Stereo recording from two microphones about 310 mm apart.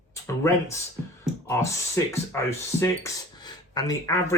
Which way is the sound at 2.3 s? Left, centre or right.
Centre.